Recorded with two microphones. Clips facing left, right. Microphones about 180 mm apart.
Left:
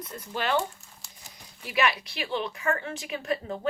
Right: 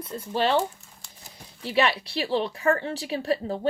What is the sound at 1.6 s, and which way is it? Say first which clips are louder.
Speech: right 3 dB; 30° right (ahead or behind).